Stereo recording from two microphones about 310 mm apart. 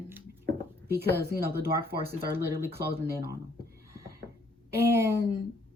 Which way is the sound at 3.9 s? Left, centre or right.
Centre.